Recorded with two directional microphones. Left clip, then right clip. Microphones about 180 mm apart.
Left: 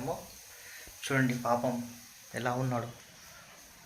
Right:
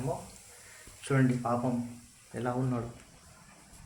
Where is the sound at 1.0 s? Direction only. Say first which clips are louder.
Even; 5° left (ahead or behind).